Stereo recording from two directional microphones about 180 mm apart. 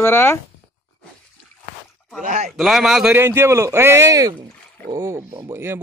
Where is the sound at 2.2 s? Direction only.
40° right (ahead or behind).